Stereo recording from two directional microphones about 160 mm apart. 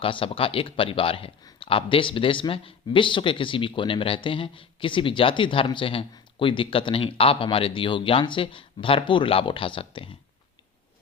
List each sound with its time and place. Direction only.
0.0 s speech: 35° left (ahead or behind)